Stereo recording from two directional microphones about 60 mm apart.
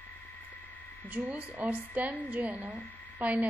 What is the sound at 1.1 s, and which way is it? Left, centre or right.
A woman's voice, right.